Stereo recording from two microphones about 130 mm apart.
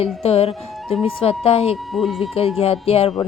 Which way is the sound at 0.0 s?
50° left (ahead or behind).